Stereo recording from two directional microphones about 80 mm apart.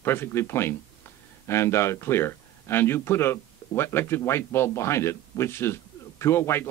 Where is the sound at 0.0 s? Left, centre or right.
Left.